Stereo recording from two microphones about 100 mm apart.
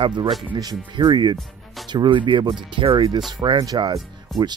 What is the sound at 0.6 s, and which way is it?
Speech, 45° right (ahead or behind).